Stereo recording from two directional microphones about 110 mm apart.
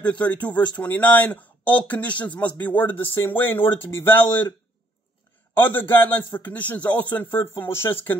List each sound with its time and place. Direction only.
0.0 s a man's voice: 15° left (ahead or behind)
5.6 s a man's voice: 20° left (ahead or behind)